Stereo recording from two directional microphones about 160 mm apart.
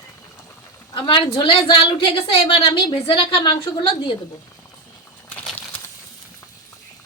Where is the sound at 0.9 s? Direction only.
30° left (ahead or behind).